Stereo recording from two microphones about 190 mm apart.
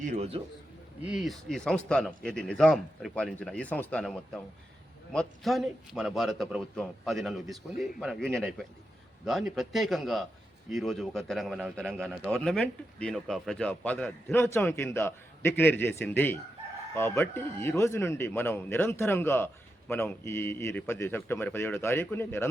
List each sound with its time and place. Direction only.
0.0 s a man's voice: 35° right (ahead or behind)
1.0 s a man's voice: centre (ahead or behind); by 22.4 s 15° left (ahead or behind)